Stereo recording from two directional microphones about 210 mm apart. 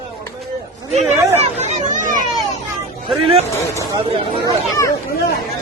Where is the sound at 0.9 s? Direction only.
30° right (ahead or behind).